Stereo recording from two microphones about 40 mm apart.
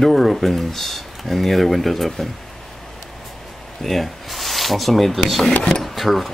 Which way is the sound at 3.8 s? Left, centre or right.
Centre.